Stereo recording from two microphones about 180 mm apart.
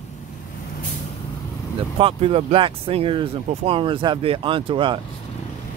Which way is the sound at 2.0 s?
30° right (ahead or behind).